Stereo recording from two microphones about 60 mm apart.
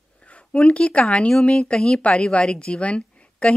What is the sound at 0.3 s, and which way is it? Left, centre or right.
A woman's voice, centre.